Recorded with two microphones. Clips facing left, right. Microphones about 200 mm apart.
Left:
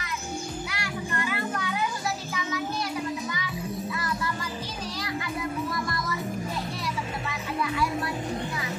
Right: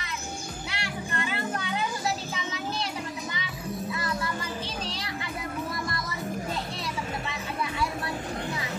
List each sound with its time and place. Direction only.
0.7 s children playing: 25° right (ahead or behind)